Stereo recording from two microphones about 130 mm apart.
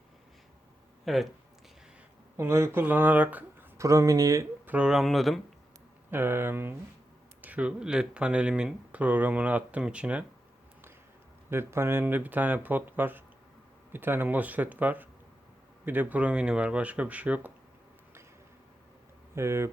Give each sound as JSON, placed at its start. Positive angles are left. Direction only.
{"t": 1.0, "sound": "speech", "side_deg": 0}
{"t": 2.3, "sound": "speech", "side_deg": -20}
{"t": 4.6, "sound": "speech", "side_deg": -10}
{"t": 6.1, "sound": "speech", "side_deg": -15}
{"t": 11.4, "sound": "speech", "side_deg": -20}
{"t": 19.3, "sound": "speech", "side_deg": -20}